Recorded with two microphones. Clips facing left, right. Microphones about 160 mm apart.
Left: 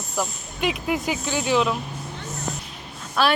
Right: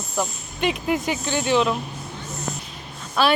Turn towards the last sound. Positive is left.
turn(degrees=0)  # may be behind; listen again after turning